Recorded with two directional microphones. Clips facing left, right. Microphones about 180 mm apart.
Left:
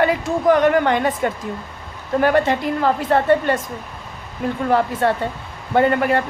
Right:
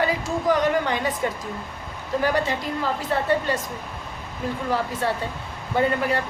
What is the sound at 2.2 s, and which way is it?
A woman's voice, 60° left (ahead or behind).